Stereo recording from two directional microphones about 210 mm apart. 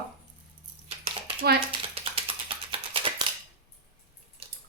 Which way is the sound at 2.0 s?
25° right (ahead or behind).